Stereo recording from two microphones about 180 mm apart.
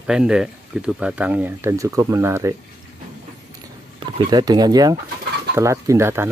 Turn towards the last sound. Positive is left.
turn(degrees=-15)  # may be behind; listen again after turning